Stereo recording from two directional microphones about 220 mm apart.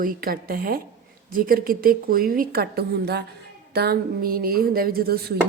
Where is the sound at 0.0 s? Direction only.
40° right (ahead or behind).